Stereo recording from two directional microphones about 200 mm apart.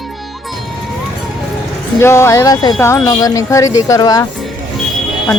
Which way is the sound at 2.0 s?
15° left (ahead or behind).